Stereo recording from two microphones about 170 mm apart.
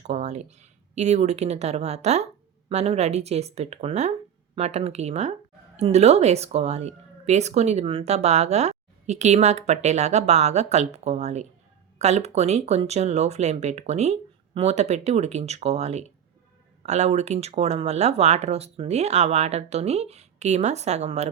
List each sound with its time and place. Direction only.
0.0 s speech: 40° right (ahead or behind)